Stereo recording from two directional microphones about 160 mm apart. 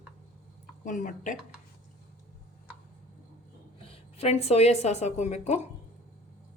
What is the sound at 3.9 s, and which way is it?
A woman's voice, 40° left (ahead or behind).